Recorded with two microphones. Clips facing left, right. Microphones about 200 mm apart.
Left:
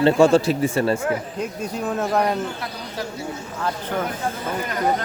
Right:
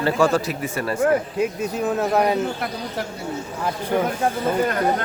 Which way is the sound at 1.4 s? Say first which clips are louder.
Right 4 dB; 5° right (ahead or behind).